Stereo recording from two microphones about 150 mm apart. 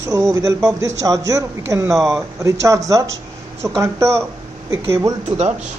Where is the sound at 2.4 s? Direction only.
20° right (ahead or behind).